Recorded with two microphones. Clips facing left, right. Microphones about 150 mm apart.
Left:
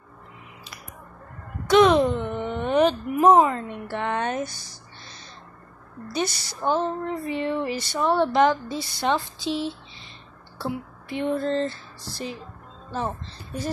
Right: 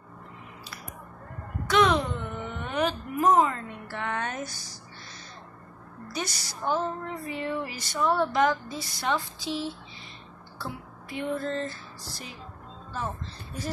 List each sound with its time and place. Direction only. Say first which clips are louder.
1.7 s a sound: left 7 dB; 20° left (ahead or behind)
3.3 s speech: left 4 dB; 20° left (ahead or behind)
6.1 s speech: left 7 dB; 25° left (ahead or behind)